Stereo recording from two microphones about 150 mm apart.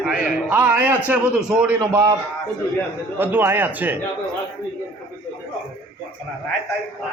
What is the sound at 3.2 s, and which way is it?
Speech, 15° right (ahead or behind).